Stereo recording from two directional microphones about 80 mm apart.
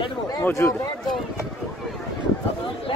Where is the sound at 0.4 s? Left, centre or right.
Left.